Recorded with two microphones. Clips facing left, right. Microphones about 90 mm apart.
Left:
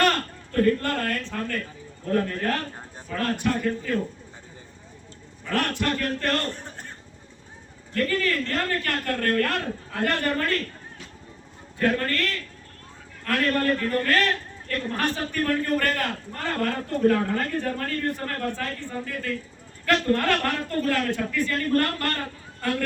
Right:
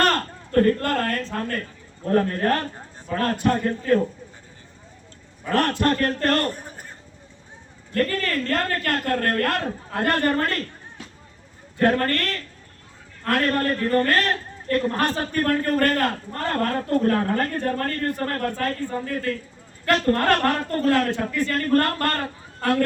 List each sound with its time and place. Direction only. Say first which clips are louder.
0.0 s a man's voice: right 1 dB; 40° right (ahead or behind)
5.5 s a man's voice: right 5 dB; 40° right (ahead or behind)
7.9 s a man's voice: right 1 dB; 45° right (ahead or behind)
11.8 s a man's voice: right 4 dB; 40° right (ahead or behind)